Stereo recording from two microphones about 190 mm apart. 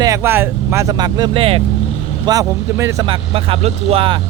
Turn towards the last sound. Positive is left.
turn(degrees=-30)  # may be behind; listen again after turning